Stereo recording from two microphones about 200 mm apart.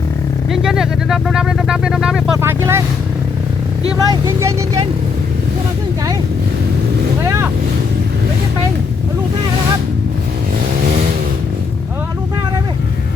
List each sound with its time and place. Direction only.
0.5 s speech: centre (ahead or behind)
3.9 s speech: 15° right (ahead or behind)
7.3 s boat: 15° right (ahead or behind)